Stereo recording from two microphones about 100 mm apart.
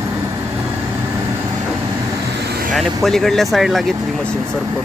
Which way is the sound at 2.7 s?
Centre (ahead or behind).